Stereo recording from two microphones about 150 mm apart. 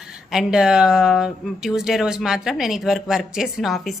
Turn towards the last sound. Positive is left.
turn(degrees=0)  # may be behind; listen again after turning